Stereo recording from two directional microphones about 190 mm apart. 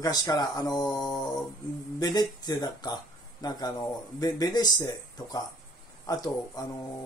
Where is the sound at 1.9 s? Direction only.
20° left (ahead or behind).